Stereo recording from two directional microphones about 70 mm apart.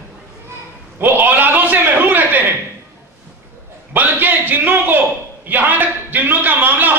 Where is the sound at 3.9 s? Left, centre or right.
Right.